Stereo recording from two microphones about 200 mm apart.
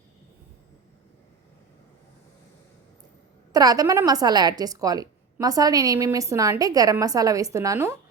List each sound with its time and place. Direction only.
3.5 s a woman's voice: 20° right (ahead or behind)